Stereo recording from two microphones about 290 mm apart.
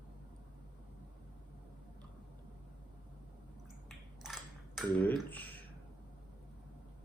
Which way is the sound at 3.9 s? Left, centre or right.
Centre.